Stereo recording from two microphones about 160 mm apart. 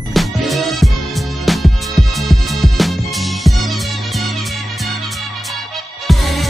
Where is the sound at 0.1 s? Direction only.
Centre (ahead or behind).